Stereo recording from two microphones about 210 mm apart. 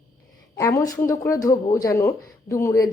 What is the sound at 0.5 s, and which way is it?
Speech, 15° left (ahead or behind).